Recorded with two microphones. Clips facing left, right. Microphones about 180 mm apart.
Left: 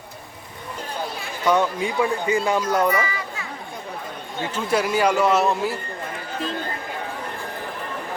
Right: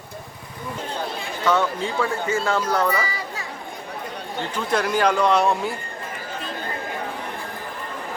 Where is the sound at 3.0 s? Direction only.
35° right (ahead or behind).